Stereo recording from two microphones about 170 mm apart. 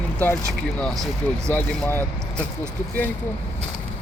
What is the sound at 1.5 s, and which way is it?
Speech, 10° left (ahead or behind).